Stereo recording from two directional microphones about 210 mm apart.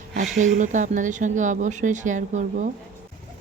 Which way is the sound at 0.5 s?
35° right (ahead or behind).